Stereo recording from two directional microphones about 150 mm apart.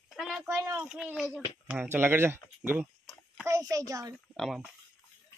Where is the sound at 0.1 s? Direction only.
Centre (ahead or behind).